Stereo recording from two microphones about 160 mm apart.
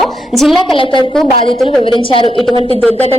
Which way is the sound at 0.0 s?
Centre (ahead or behind).